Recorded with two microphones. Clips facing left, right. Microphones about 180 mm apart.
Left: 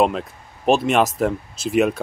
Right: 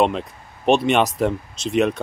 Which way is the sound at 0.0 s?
Centre (ahead or behind).